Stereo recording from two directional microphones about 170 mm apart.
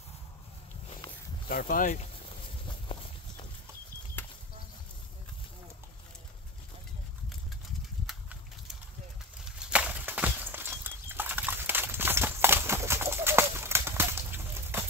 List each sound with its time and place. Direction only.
1.5 s speech: 60° left (ahead or behind)
8.1 s a sound: centre (ahead or behind)
9.4 s horse: 5° right (ahead or behind)